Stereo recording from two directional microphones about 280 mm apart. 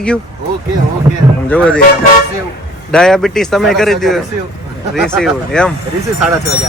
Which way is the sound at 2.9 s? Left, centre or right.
Centre.